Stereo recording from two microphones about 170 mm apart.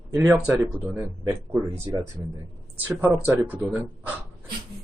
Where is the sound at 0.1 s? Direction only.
15° right (ahead or behind); by 1.7 s centre (ahead or behind).